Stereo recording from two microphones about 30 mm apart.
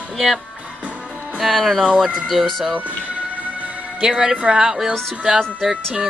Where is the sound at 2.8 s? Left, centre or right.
Right.